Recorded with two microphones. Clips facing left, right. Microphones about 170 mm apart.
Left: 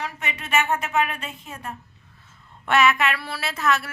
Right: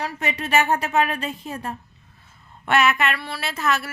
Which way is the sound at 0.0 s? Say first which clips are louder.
Right 5 dB; 35° right (ahead or behind).